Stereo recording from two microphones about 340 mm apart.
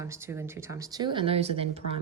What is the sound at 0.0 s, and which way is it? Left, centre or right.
A woman's voice, centre.